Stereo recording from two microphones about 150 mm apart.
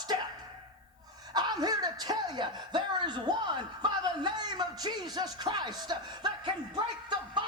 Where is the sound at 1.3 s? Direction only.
25° right (ahead or behind).